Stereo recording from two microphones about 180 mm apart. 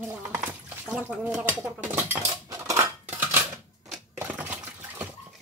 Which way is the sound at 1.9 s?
10° right (ahead or behind).